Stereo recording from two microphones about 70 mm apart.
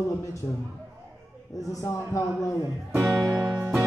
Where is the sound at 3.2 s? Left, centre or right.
Right.